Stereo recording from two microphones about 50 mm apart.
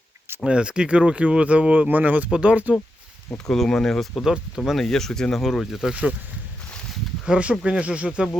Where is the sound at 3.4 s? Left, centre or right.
Centre.